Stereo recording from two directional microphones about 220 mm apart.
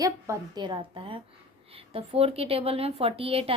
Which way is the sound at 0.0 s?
15° right (ahead or behind).